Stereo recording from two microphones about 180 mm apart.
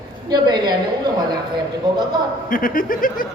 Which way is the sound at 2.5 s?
50° left (ahead or behind).